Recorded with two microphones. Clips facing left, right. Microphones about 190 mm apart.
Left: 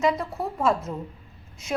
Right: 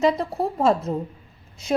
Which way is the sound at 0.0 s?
35° right (ahead or behind).